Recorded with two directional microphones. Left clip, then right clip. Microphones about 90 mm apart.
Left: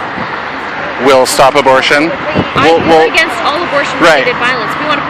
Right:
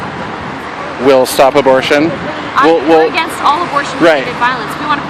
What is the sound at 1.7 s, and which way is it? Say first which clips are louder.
Speech: left 2 dB; 65° right (ahead or behind).